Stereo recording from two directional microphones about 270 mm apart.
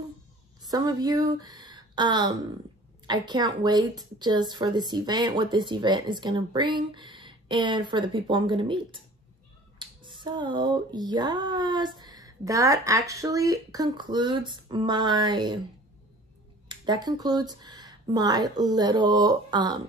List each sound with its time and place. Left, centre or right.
0.6 s speech: centre
16.6 s speech: centre